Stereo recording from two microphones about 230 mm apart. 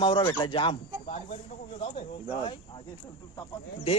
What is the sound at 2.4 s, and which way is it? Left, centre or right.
Speech, left.